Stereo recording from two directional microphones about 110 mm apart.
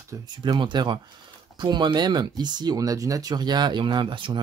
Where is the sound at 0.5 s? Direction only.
45° right (ahead or behind).